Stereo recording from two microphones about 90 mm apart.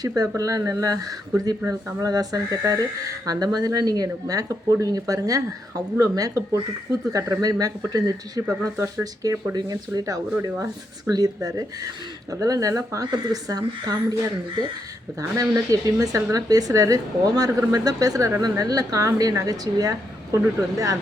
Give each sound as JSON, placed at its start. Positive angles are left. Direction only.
{"t": 0.0, "sound": "speech", "side_deg": -40}
{"t": 10.4, "sound": "speech", "side_deg": -35}
{"t": 11.1, "sound": "speech", "side_deg": -45}
{"t": 15.2, "sound": "speech", "side_deg": -40}